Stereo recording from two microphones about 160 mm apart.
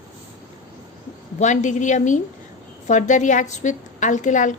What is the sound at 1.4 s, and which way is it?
A woman's voice, 50° left (ahead or behind).